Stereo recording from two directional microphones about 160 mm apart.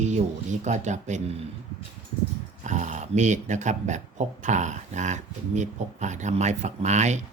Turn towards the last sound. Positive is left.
turn(degrees=-45)  # may be behind; listen again after turning